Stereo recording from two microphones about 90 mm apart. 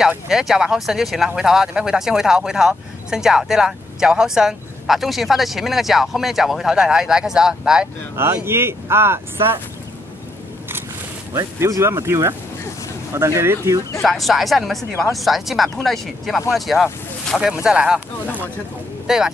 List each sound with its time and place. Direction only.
0.3 s speech: 5° right (ahead or behind)
8.2 s speech: 25° right (ahead or behind)
11.3 s speech: 35° right (ahead or behind)
14.0 s speech: centre (ahead or behind)